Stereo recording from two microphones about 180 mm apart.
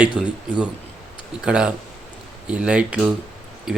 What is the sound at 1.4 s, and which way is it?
A man's voice, 5° right (ahead or behind).